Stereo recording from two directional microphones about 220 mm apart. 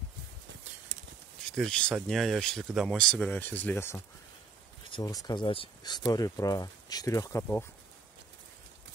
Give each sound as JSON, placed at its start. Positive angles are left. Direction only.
{"t": 1.5, "sound": "speech", "side_deg": 5}